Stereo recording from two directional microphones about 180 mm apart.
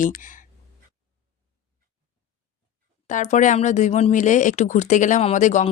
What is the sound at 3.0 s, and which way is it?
Speech, 40° left (ahead or behind).